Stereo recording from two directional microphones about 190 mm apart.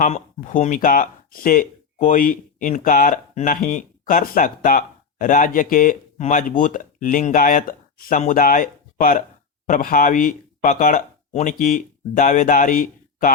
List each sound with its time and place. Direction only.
0.0 s speech: 40° left (ahead or behind)